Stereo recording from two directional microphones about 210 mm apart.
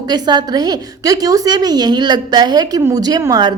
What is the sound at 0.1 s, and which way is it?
A woman's voice, 20° right (ahead or behind).